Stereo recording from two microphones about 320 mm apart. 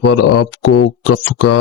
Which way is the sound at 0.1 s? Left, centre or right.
Left.